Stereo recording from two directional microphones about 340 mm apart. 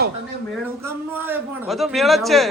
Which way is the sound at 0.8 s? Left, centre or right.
Centre.